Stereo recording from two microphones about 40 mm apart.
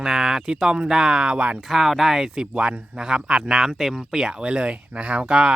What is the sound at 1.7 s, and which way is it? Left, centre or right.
Speech, centre.